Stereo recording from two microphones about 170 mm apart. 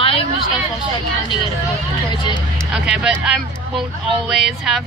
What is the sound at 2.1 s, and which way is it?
Vehicle, 25° left (ahead or behind).